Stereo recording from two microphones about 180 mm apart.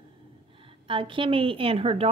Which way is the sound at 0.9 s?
30° right (ahead or behind).